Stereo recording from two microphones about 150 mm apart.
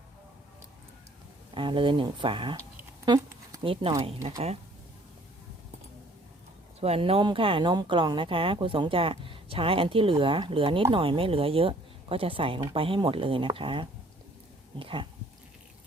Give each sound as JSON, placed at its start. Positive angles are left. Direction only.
{"t": 1.5, "sound": "speech", "side_deg": -35}
{"t": 3.6, "sound": "speech", "side_deg": -35}
{"t": 6.7, "sound": "speech", "side_deg": -45}